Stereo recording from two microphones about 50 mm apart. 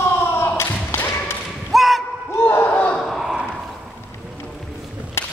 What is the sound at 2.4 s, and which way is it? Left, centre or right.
Battle cry, left.